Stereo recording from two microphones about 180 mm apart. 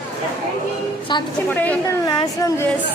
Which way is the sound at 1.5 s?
10° left (ahead or behind).